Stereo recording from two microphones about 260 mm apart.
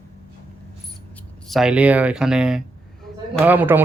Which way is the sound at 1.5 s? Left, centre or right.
Centre.